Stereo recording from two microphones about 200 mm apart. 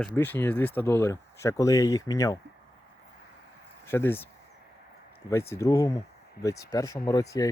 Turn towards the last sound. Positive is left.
turn(degrees=15)  # may be behind; listen again after turning